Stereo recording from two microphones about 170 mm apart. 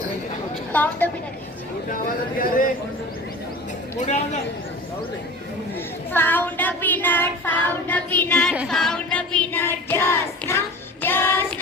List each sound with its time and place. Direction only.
0.7 s a woman's voice: 10° left (ahead or behind)
3.9 s a man's voice: 45° left (ahead or behind)
6.1 s child singing: 10° left (ahead or behind)